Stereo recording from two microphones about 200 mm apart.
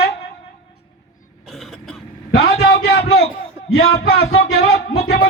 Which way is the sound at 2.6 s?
55° left (ahead or behind).